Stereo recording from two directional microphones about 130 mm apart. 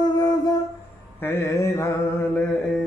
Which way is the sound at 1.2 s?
20° left (ahead or behind).